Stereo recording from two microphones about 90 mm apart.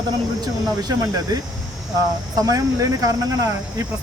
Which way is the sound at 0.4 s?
50° right (ahead or behind).